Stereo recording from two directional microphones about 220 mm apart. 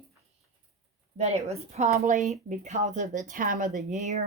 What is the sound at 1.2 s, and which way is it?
Speech, 30° right (ahead or behind).